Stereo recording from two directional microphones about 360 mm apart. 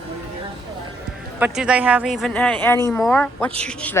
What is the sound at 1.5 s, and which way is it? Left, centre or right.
Speech, centre.